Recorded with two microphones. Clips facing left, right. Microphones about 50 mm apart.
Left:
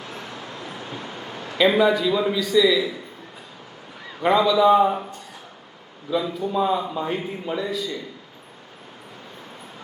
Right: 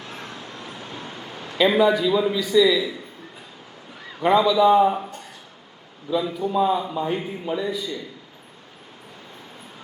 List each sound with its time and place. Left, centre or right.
0.3 s vehicle: left
0.9 s vehicle: centre
1.5 s a man's voice: centre
4.2 s a man's voice: centre
6.1 s a man's voice: centre